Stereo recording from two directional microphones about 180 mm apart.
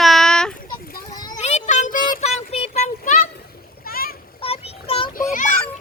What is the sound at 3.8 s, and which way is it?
Splash, 55° left (ahead or behind).